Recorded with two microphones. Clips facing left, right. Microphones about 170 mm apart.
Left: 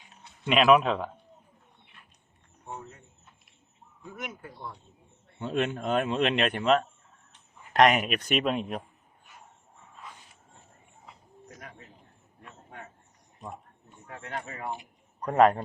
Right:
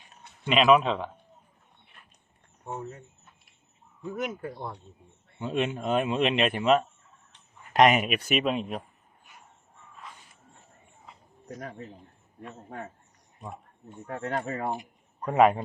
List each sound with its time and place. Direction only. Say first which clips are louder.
0.4 s a man's voice: even; centre (ahead or behind)
4.1 s speech: right 8 dB; 55° right (ahead or behind)
5.4 s a man's voice: even; centre (ahead or behind)
11.4 s speech: right 9 dB; 40° right (ahead or behind)
14.1 s speech: right 7 dB; 40° right (ahead or behind)
15.2 s a man's voice: even; 5° right (ahead or behind)